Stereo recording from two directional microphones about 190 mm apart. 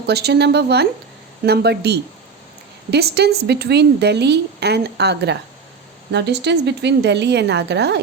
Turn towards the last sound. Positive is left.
turn(degrees=-65)  # may be behind; listen again after turning